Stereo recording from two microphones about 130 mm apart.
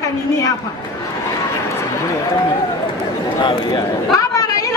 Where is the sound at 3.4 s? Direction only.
35° left (ahead or behind).